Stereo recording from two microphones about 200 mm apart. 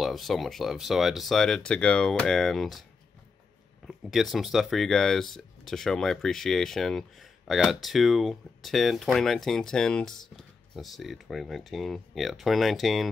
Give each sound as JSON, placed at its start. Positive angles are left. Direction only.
{"t": 0.0, "sound": "speech", "side_deg": 0}
{"t": 3.8, "sound": "speech", "side_deg": 0}